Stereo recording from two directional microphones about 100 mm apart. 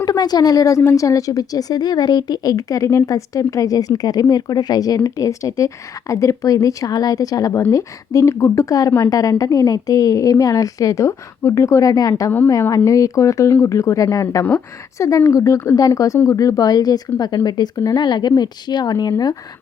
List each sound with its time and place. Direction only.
0.0 s a woman's voice: 40° left (ahead or behind)